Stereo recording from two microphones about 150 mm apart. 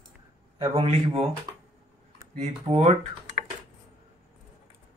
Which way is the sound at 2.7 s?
45° right (ahead or behind).